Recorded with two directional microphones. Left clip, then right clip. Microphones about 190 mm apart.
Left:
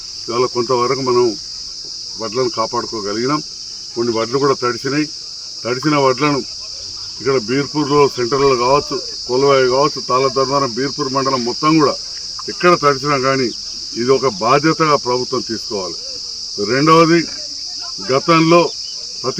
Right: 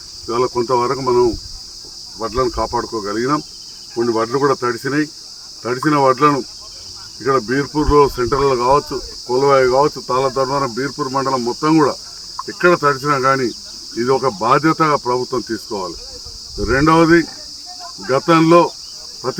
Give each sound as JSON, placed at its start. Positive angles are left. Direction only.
{"t": 0.3, "sound": "cricket", "side_deg": -5}